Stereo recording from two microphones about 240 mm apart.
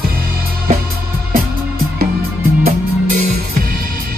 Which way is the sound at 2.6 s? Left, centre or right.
Right.